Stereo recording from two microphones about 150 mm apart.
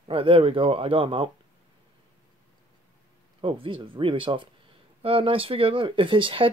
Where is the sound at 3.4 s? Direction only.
35° right (ahead or behind).